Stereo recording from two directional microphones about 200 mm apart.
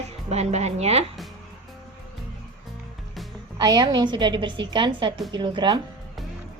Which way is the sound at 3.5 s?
20° right (ahead or behind).